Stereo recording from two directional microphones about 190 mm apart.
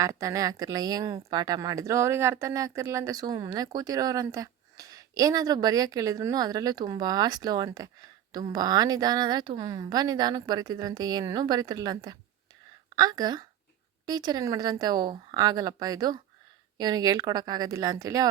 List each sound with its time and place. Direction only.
0.0 s speech: 15° right (ahead or behind)